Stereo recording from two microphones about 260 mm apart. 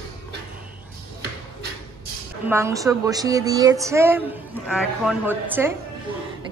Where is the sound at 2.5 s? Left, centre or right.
Centre.